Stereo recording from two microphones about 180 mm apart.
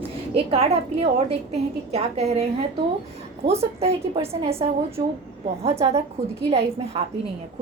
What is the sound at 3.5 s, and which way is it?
A woman's voice, 35° right (ahead or behind).